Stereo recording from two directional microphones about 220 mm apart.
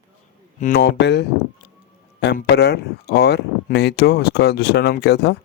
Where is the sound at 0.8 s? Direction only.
50° left (ahead or behind).